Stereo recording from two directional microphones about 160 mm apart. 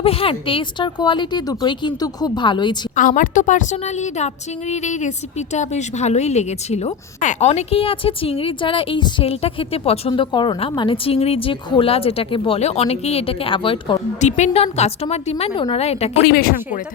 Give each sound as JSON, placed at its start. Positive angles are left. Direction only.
{"t": 0.0, "sound": "speech", "side_deg": 35}
{"t": 2.9, "sound": "a woman's voice", "side_deg": 55}
{"t": 14.2, "sound": "a woman's voice", "side_deg": 45}
{"t": 16.2, "sound": "speech", "side_deg": 70}